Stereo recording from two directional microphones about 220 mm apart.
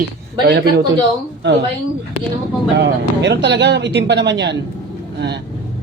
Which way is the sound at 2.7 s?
50° right (ahead or behind).